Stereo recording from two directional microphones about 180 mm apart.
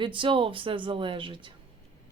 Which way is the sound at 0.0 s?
25° right (ahead or behind).